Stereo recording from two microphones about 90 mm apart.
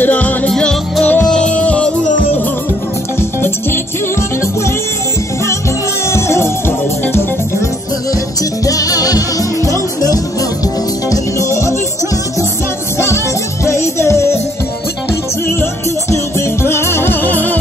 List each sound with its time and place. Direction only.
0.0 s music: 20° left (ahead or behind)
0.5 s music: 5° left (ahead or behind)
3.2 s music: 25° left (ahead or behind)
6.0 s music: 30° left (ahead or behind)
8.6 s music: 40° left (ahead or behind)
13.7 s music: 30° left (ahead or behind)
15.4 s music: 30° left (ahead or behind)